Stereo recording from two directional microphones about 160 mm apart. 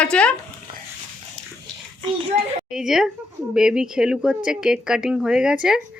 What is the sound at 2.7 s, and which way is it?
Speech, 5° right (ahead or behind).